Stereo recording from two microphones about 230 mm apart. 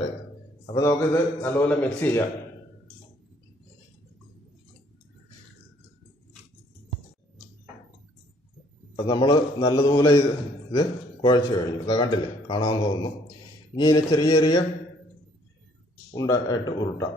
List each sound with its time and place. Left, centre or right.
0.7 s a man's voice: centre
8.9 s a man's voice: centre
16.1 s a man's voice: centre